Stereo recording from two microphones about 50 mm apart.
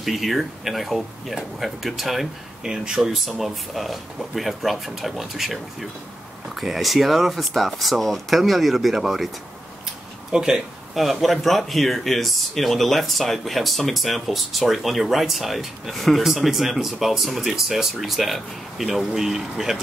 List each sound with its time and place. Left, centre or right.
0.0 s speech: centre
2.7 s speech: centre
10.3 s speech: centre
11.0 s speech: centre